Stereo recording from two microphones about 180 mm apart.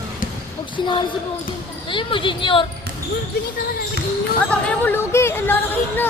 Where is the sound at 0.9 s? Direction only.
25° left (ahead or behind).